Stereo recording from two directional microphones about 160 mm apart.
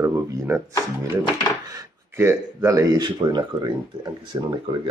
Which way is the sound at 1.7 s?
15° right (ahead or behind).